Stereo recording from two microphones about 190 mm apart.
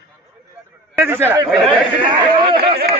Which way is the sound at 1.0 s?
10° right (ahead or behind).